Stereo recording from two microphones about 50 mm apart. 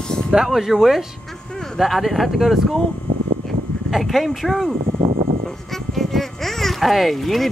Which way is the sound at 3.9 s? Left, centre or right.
Centre.